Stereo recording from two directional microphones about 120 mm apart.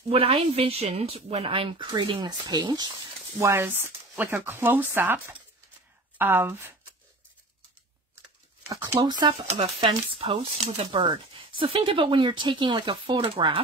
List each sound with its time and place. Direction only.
0.1 s speech: 55° right (ahead or behind); by 2.9 s 35° right (ahead or behind)
3.3 s speech: 20° right (ahead or behind)
9.0 s speech: 40° right (ahead or behind)
9.5 s speech: 50° right (ahead or behind)